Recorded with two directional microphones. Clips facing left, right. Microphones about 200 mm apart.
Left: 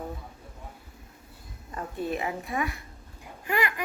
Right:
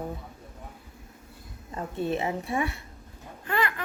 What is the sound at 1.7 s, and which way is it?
A woman's voice, 25° right (ahead or behind).